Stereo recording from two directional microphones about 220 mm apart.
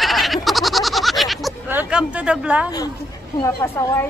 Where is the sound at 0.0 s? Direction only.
Centre (ahead or behind).